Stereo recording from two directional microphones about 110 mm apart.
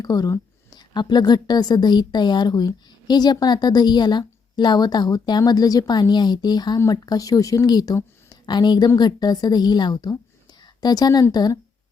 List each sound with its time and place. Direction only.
0.0 s a woman's voice: 35° left (ahead or behind)